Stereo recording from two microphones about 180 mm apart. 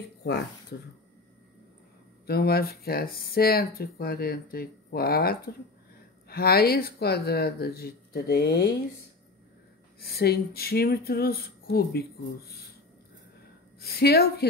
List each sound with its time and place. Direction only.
2.2 s speech: 60° left (ahead or behind)
9.9 s speech: 60° left (ahead or behind)
13.7 s speech: 60° left (ahead or behind)